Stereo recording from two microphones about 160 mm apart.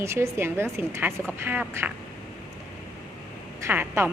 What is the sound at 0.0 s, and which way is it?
A woman's voice, 15° right (ahead or behind).